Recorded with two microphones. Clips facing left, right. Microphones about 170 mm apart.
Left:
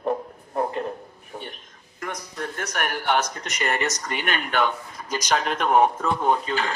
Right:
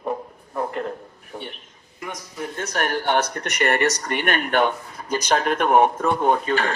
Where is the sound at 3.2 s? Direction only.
60° right (ahead or behind).